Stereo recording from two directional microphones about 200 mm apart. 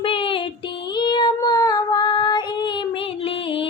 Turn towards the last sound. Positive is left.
turn(degrees=25)  # may be behind; listen again after turning